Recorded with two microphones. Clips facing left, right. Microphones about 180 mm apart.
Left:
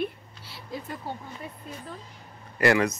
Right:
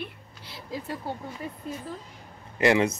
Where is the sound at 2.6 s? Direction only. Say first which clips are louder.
Even; 15° right (ahead or behind).